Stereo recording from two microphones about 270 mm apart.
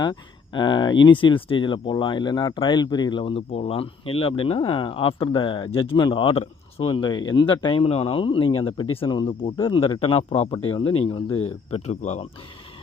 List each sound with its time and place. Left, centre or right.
0.0 s a man's voice: centre